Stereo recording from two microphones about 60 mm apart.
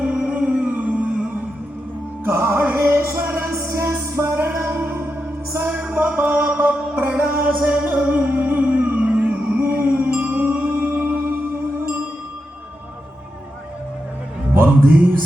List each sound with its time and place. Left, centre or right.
0.0 s music: centre
2.2 s music: right
2.7 s music: right
3.7 s music: right
4.2 s music: right
7.9 s a sound: right
9.6 s music: right